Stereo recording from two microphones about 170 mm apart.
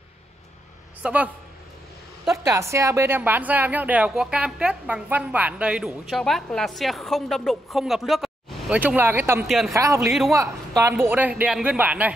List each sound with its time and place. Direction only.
1.0 s a woman's voice: 10° right (ahead or behind)
2.3 s a woman's voice: 15° right (ahead or behind)
9.5 s a woman's voice: centre (ahead or behind)
9.8 s a woman's voice: 15° right (ahead or behind)